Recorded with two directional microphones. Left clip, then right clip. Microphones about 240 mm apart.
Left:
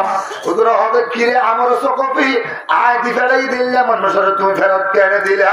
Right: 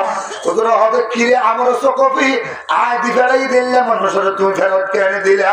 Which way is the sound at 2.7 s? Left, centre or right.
Left.